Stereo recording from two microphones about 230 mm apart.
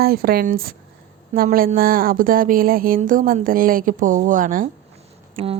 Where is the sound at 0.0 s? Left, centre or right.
Right.